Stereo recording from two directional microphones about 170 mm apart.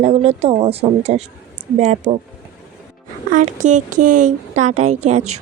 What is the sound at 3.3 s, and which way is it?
A woman's voice, 50° right (ahead or behind).